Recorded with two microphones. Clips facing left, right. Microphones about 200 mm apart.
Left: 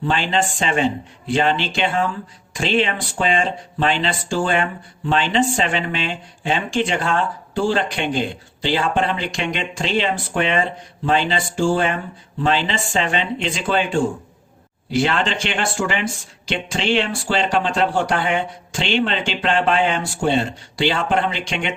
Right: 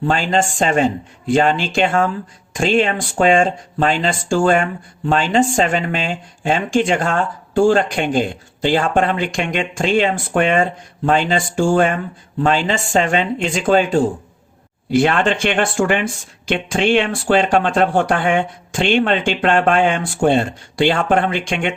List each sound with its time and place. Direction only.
0.0 s speech: 45° right (ahead or behind)
14.8 s speech: 50° right (ahead or behind)